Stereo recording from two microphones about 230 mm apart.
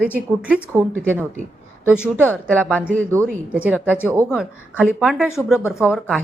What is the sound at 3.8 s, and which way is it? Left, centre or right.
Speech, centre.